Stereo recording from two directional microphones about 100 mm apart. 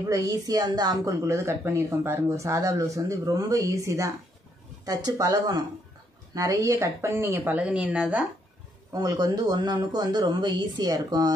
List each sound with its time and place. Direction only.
0.1 s speech: 35° right (ahead or behind)
1.2 s speech: 30° right (ahead or behind); by 8.3 s 10° right (ahead or behind)
8.9 s speech: 40° right (ahead or behind)